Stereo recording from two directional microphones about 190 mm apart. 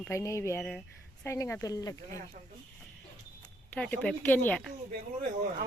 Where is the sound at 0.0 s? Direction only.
15° left (ahead or behind).